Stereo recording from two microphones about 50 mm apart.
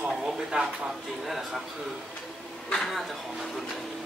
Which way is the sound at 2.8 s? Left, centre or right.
Centre.